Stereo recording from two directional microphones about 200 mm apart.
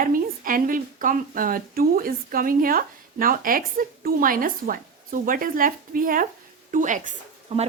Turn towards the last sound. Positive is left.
turn(degrees=-35)  # may be behind; listen again after turning